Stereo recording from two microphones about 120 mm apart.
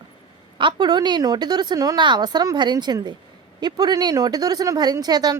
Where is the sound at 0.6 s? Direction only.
40° right (ahead or behind).